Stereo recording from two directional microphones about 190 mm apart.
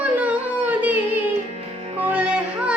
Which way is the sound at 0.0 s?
10° right (ahead or behind).